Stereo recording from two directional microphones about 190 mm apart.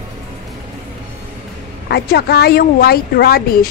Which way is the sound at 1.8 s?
55° left (ahead or behind).